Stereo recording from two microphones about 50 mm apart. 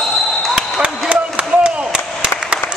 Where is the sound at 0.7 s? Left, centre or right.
Right.